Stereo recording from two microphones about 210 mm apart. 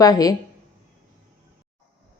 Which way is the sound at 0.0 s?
15° left (ahead or behind).